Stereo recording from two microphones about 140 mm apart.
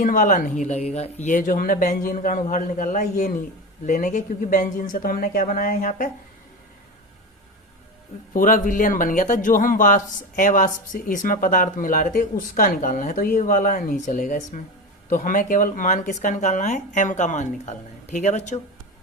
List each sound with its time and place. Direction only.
0.0 s a man's voice: 70° left (ahead or behind)
8.3 s a man's voice: 75° left (ahead or behind); by 18.6 s 55° left (ahead or behind)